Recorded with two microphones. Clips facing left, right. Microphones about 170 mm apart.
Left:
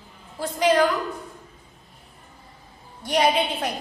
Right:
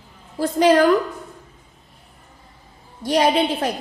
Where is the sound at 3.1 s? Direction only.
40° right (ahead or behind).